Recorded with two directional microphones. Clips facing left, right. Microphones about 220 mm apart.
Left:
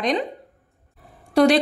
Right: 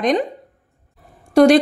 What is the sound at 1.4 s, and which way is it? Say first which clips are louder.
Speech: right 5 dB; 45° right (ahead or behind).